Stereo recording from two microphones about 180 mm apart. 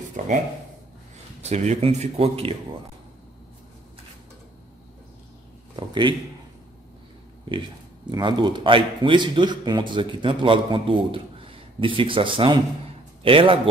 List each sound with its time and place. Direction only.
0.2 s speech: 40° right (ahead or behind)
1.4 s speech: 40° right (ahead or behind)
5.8 s a man's voice: 25° right (ahead or behind)
7.4 s a man's voice: 25° right (ahead or behind)